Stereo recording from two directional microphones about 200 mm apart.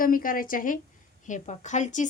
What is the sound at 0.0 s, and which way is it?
A woman's voice, 45° left (ahead or behind).